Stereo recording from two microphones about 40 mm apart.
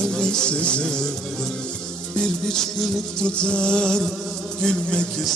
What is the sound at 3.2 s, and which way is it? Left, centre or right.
Music, left.